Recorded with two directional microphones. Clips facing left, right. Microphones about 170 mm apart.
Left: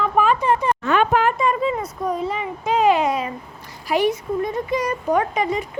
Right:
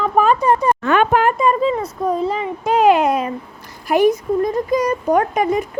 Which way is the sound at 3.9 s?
45° right (ahead or behind).